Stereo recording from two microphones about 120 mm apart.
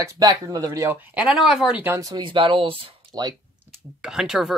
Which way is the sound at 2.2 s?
45° right (ahead or behind).